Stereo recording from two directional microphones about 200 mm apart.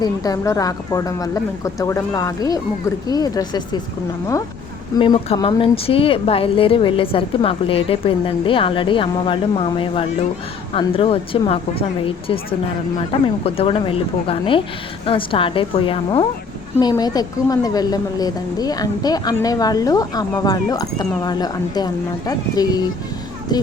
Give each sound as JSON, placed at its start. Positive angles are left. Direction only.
{"t": 0.0, "sound": "speech", "side_deg": 20}
{"t": 4.9, "sound": "speech", "side_deg": 25}